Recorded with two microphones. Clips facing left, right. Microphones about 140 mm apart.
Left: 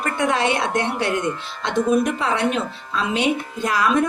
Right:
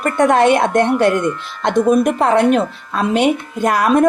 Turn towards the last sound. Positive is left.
turn(degrees=-50)  # may be behind; listen again after turning